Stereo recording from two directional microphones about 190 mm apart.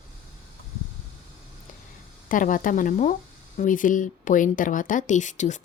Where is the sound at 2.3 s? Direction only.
45° left (ahead or behind).